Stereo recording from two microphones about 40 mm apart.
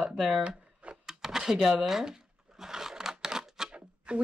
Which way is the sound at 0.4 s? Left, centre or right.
Right.